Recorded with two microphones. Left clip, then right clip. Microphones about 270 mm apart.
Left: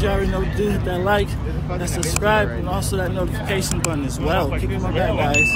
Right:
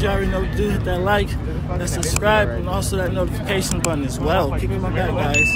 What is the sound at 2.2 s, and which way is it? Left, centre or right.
Speech, centre.